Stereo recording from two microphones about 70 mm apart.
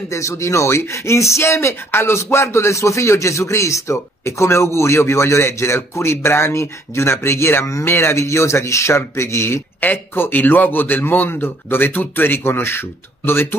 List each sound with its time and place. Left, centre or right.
0.1 s a man's voice: left